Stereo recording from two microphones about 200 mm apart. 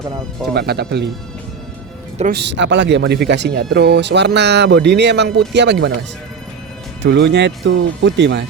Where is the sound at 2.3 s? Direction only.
60° right (ahead or behind).